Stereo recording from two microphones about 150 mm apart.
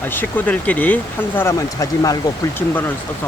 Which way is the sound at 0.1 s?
15° left (ahead or behind).